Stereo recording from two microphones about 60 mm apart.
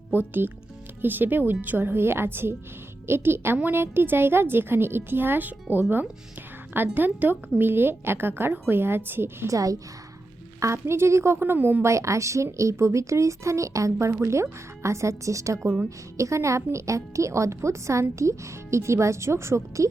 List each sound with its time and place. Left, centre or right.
0.1 s a woman's voice: right
9.5 s a woman's voice: right
10.6 s speech: right
11.8 s speech: right
14.1 s speech: right